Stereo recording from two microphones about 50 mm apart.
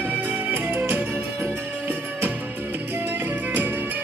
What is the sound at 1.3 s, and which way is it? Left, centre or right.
Music, right.